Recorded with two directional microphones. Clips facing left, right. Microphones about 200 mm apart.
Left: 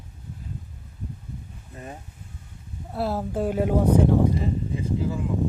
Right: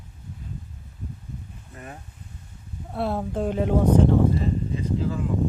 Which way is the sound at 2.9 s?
Centre (ahead or behind).